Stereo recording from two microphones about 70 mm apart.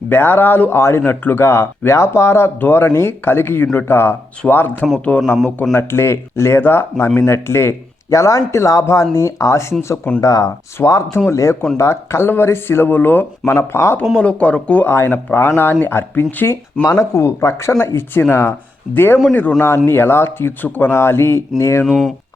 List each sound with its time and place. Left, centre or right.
0.1 s speech: left
5.7 s speech: left
13.5 s speech: left
14.2 s speech: centre
14.8 s speech: left
16.8 s speech: left
19.6 s speech: left
21.8 s speech: centre